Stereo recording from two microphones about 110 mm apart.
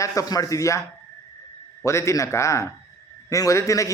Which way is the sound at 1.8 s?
25° left (ahead or behind).